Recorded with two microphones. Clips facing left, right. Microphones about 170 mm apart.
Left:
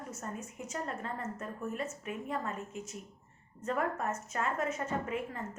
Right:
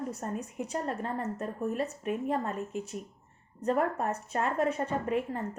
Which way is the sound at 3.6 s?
35° right (ahead or behind).